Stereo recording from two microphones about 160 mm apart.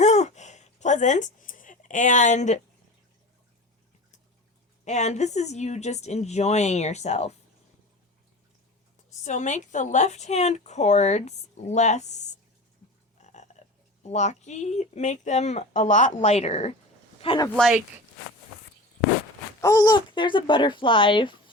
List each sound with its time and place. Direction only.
0.0 s a sound: 45° left (ahead or behind)
4.9 s speech: 45° left (ahead or behind)
9.2 s speech: 50° left (ahead or behind)
13.1 s frog: 45° left (ahead or behind)
14.0 s speech: 45° left (ahead or behind)
17.6 s speech: 5° right (ahead or behind)
19.6 s speech: 25° left (ahead or behind)